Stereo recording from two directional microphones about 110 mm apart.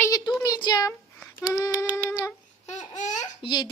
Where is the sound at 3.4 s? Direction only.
45° left (ahead or behind).